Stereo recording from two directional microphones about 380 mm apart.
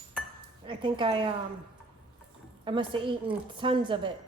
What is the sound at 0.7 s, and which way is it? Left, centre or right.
Speech, centre.